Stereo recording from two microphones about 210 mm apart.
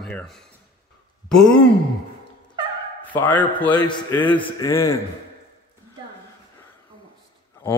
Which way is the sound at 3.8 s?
20° left (ahead or behind).